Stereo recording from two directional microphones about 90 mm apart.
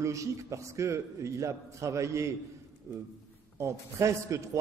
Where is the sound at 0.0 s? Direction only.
35° right (ahead or behind).